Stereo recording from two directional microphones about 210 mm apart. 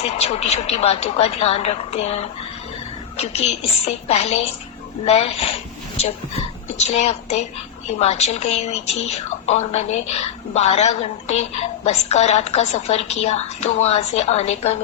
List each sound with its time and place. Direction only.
0.0 s a woman's voice: 30° left (ahead or behind)